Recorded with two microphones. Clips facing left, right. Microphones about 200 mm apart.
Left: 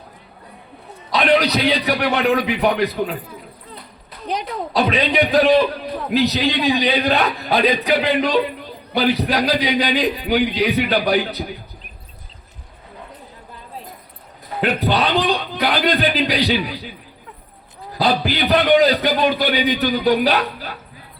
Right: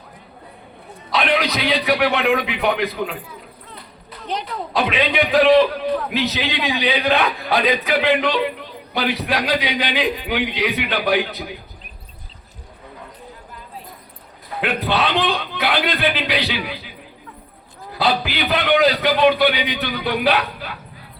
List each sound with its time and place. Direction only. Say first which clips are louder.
1.1 s a sound: left 4 dB; 35° left (ahead or behind)
2.1 s a man's voice: left 2 dB; 40° left (ahead or behind)
4.7 s a man's voice: left 2 dB; 35° left (ahead or behind)
14.6 s a man's voice: left 2 dB; 40° left (ahead or behind)
17.9 s a man's voice: left 2 dB; 40° left (ahead or behind)